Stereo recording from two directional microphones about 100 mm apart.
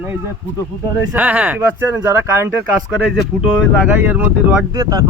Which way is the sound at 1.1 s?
15° right (ahead or behind).